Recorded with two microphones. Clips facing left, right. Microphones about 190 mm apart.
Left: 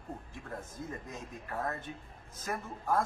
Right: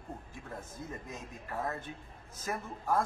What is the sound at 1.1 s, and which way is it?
Speech, centre (ahead or behind).